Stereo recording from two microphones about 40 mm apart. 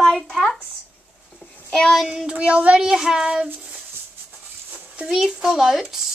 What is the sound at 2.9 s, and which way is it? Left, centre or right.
Speech, centre.